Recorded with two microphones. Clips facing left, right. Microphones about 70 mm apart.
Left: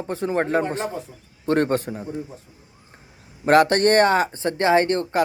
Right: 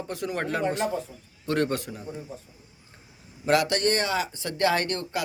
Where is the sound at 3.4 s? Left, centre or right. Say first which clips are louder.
Left 7 dB; left.